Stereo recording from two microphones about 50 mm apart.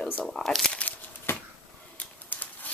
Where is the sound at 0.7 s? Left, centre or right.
Left.